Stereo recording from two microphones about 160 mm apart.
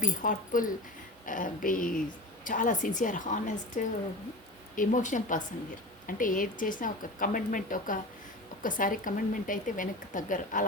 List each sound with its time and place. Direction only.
0.0 s a woman's voice: 55° left (ahead or behind)